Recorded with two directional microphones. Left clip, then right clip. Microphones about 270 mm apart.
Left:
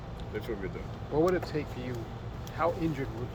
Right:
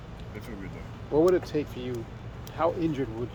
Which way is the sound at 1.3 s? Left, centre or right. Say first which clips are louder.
Right 5 dB; right.